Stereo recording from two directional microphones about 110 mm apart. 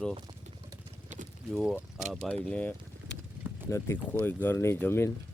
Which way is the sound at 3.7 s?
25° left (ahead or behind).